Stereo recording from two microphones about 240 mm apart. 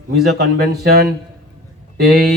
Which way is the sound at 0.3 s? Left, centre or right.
Right.